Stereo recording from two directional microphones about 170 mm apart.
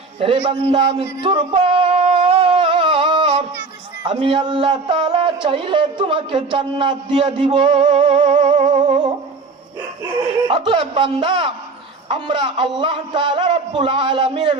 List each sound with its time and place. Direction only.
0.2 s speech: 30° right (ahead or behind)
1.2 s a sound: 30° right (ahead or behind)
4.0 s speech: 30° right (ahead or behind)
8.6 s humming: 30° right (ahead or behind)
10.5 s a man's voice: 30° right (ahead or behind)